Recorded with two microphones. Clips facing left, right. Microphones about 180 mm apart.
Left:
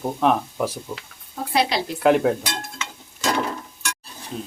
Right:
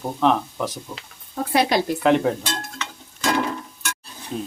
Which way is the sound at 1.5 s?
50° right (ahead or behind).